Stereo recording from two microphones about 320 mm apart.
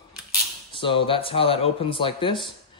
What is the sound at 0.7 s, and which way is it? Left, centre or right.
Speech, centre.